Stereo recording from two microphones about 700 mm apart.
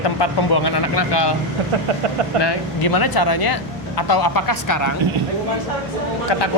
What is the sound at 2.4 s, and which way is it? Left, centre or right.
Speech, left.